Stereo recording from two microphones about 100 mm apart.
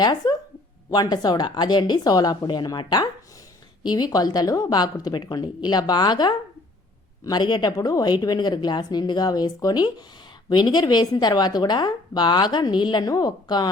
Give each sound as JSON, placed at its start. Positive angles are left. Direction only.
{"t": 0.0, "sound": "a woman's voice", "side_deg": 40}